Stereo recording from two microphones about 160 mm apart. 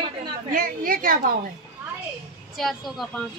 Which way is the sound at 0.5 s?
60° right (ahead or behind).